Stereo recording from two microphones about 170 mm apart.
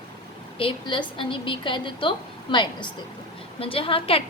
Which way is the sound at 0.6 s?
30° left (ahead or behind).